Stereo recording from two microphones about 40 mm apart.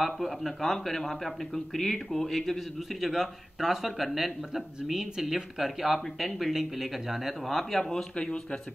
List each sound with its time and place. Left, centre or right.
0.0 s speech: centre
3.0 s speech: centre
7.9 s speech: left